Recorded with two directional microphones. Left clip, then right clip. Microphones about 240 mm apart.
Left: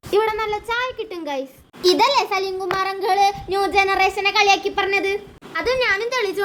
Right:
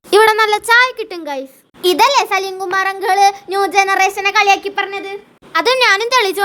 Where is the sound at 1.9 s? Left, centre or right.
Right.